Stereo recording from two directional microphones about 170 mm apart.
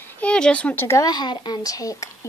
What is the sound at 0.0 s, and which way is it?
Speech, 5° left (ahead or behind).